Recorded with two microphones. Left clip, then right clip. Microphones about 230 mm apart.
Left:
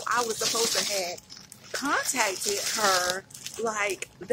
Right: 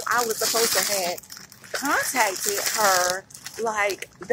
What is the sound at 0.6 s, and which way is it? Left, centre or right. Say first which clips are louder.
Speech: right 4 dB; right.